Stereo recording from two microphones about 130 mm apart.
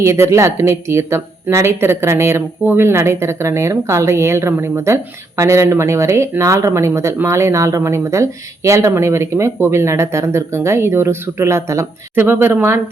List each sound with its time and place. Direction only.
0.0 s speech: 20° right (ahead or behind)